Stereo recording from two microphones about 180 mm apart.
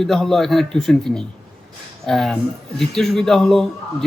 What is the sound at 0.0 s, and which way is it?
Speech, centre (ahead or behind).